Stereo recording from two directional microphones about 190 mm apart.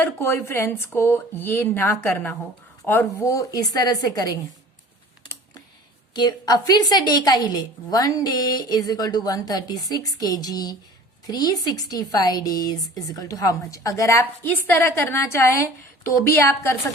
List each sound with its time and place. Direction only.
0.0 s a woman's voice: 15° left (ahead or behind)
6.1 s a woman's voice: 20° left (ahead or behind)